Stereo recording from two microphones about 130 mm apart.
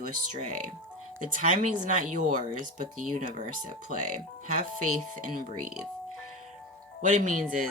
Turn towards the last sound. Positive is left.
turn(degrees=-85)